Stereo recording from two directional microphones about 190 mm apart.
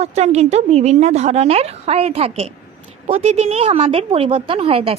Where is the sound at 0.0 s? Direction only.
35° right (ahead or behind).